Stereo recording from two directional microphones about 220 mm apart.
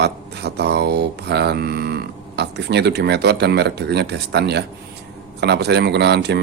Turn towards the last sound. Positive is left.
turn(degrees=-50)  # may be behind; listen again after turning